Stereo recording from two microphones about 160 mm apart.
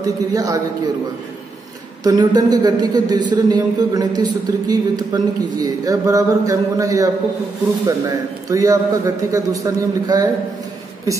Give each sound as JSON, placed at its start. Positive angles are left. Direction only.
{"t": 0.0, "sound": "a man's voice", "side_deg": -20}
{"t": 2.0, "sound": "a man's voice", "side_deg": -25}